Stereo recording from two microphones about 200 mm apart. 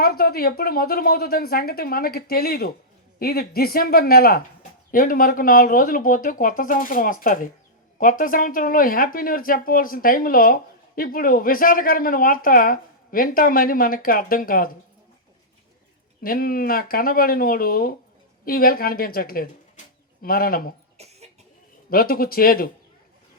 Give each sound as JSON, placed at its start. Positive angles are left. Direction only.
{"t": 0.0, "sound": "speech", "side_deg": 50}
{"t": 16.2, "sound": "speech", "side_deg": 45}
{"t": 21.0, "sound": "cough", "side_deg": -30}
{"t": 21.8, "sound": "speech", "side_deg": 45}